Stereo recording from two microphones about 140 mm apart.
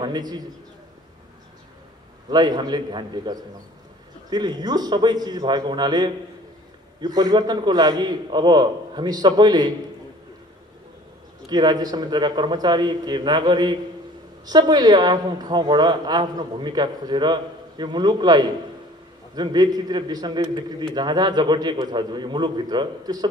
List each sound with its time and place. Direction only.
0.0 s a man's voice: 30° right (ahead or behind)
2.2 s a man's voice: 30° right (ahead or behind)
11.4 s a woman's voice: 30° right (ahead or behind)